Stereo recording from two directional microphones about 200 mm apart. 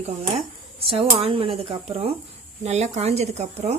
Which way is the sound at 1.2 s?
30° right (ahead or behind).